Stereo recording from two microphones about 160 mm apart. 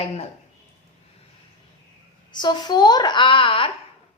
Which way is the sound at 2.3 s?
30° left (ahead or behind).